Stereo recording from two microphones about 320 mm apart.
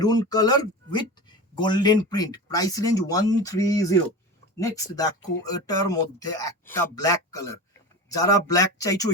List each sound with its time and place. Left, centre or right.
0.0 s speech: centre